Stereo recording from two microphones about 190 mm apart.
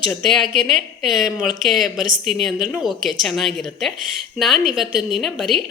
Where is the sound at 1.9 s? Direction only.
45° right (ahead or behind).